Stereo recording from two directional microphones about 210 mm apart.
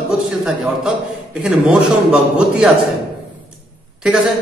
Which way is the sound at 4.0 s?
5° right (ahead or behind).